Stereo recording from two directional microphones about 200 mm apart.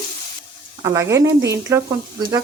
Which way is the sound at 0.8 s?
15° right (ahead or behind).